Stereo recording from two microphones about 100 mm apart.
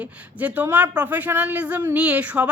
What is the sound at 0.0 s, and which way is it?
A woman's voice, 15° right (ahead or behind).